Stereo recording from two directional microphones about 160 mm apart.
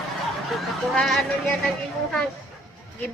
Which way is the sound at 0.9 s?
5° left (ahead or behind).